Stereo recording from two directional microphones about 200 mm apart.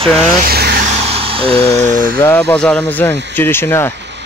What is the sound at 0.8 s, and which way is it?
Vehicle, 30° right (ahead or behind).